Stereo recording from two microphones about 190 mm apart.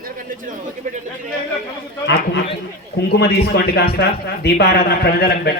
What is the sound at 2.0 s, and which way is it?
A man's voice, 65° left (ahead or behind).